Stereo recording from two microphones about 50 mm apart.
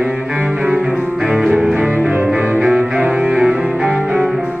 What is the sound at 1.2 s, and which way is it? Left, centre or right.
Music, right.